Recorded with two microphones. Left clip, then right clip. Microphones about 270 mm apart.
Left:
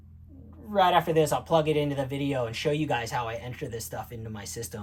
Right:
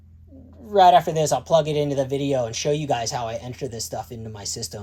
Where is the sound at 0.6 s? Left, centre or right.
Right.